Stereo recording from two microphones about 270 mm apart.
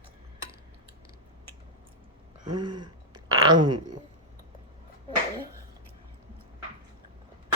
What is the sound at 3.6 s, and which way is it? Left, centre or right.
Speech, right.